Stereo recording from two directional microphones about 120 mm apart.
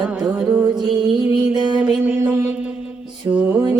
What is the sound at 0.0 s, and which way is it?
Music, 5° right (ahead or behind).